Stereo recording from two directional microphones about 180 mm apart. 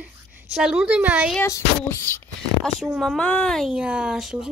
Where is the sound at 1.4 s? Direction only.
15° left (ahead or behind).